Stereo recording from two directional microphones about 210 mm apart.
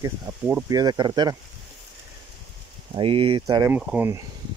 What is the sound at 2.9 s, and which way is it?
Speech, 25° right (ahead or behind).